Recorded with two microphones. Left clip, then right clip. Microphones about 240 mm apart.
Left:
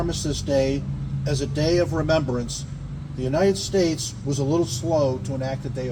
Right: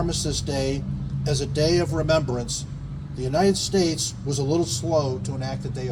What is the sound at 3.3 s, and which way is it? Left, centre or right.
A man's voice, right.